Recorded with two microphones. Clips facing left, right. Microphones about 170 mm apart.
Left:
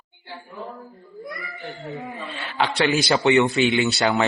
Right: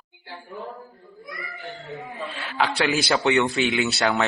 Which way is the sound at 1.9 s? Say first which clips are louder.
Right 1 dB; centre (ahead or behind).